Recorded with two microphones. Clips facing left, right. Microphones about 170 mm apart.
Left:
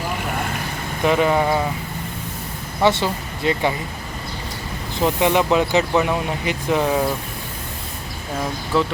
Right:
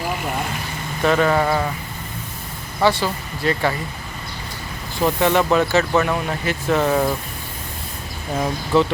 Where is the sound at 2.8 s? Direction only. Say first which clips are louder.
Even; 25° left (ahead or behind).